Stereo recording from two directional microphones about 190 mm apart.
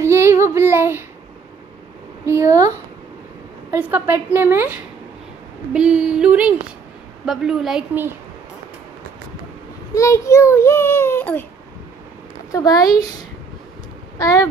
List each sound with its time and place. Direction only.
0.0 s child singing: 15° right (ahead or behind)
2.2 s a woman's voice: 15° right (ahead or behind)
5.7 s a sound: 5° right (ahead or behind)
9.9 s a child's voice: 15° left (ahead or behind)
12.4 s speech: 20° left (ahead or behind)
14.1 s a child's voice: 20° left (ahead or behind)